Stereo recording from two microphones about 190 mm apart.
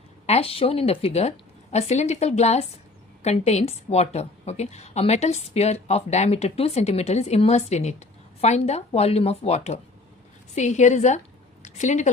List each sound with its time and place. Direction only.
0.3 s a woman's voice: 30° left (ahead or behind)